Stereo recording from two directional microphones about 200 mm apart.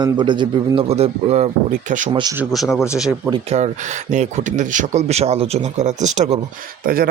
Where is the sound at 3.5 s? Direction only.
35° right (ahead or behind).